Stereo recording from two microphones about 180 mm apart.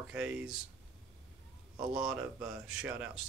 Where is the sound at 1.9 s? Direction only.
5° right (ahead or behind).